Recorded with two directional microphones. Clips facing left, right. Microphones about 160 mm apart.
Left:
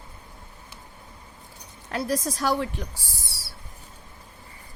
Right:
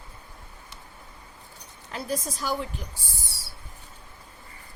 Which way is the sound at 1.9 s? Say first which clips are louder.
Left 4 dB; 75° left (ahead or behind).